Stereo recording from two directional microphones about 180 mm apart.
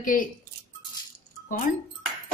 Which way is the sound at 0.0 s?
50° left (ahead or behind).